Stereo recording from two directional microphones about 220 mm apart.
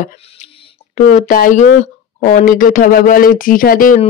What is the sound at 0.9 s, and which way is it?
Speech, 30° left (ahead or behind).